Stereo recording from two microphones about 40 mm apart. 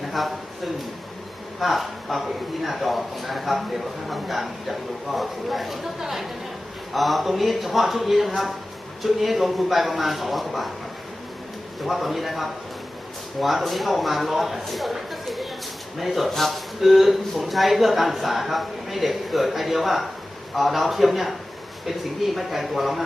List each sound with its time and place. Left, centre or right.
0.1 s a man's voice: centre
11.8 s a man's voice: centre
14.9 s a sound: centre
16.0 s a man's voice: centre
22.4 s a man's voice: centre